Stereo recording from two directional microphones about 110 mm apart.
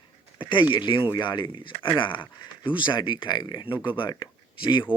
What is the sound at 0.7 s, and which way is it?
Speech, 45° left (ahead or behind).